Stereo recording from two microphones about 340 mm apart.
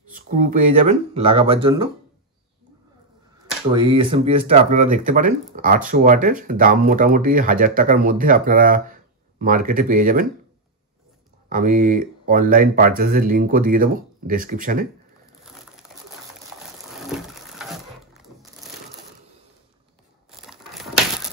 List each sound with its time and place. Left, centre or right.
0.1 s speech: right
3.7 s speech: centre
11.4 s speech: right
20.2 s crushing: centre